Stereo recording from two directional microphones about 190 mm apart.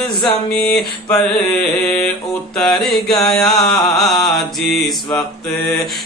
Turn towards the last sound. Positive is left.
turn(degrees=0)  # may be behind; listen again after turning